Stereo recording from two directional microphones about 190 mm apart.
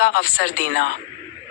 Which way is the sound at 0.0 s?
50° left (ahead or behind).